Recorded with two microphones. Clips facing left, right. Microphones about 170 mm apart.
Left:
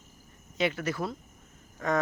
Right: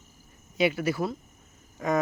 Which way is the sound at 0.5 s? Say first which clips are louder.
Right 4 dB; 10° right (ahead or behind).